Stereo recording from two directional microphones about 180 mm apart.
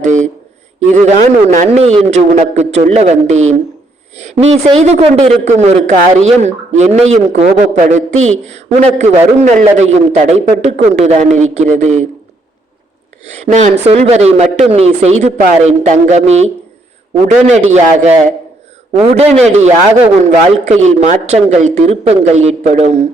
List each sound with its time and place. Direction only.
0.0 s a sound: 45° right (ahead or behind)
0.9 s a man's voice: 40° right (ahead or behind)
13.4 s a man's voice: 40° right (ahead or behind)